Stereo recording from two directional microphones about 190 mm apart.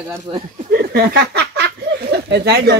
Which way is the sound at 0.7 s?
55° right (ahead or behind).